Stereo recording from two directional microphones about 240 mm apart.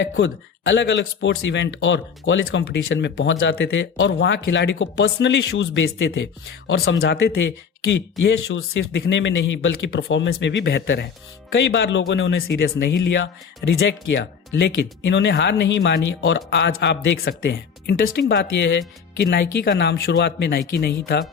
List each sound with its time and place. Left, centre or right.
0.0 s speech: left